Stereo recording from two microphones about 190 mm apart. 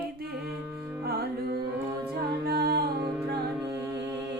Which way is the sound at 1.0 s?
55° right (ahead or behind).